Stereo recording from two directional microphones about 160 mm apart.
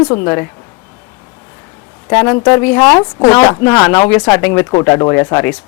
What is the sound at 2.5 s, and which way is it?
Speech, 10° left (ahead or behind).